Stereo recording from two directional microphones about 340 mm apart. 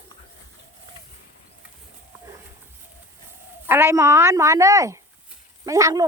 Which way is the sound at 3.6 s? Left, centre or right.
Centre.